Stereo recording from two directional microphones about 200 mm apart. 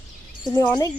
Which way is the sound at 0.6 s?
15° left (ahead or behind).